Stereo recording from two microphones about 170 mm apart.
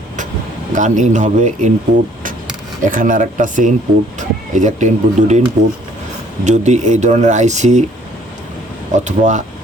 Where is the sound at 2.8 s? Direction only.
50° right (ahead or behind).